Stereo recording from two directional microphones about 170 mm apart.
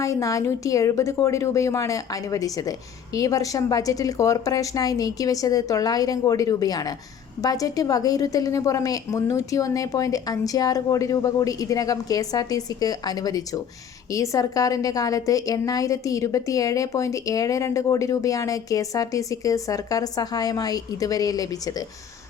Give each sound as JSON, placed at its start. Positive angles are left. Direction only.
{"t": 0.0, "sound": "a woman's voice", "side_deg": 20}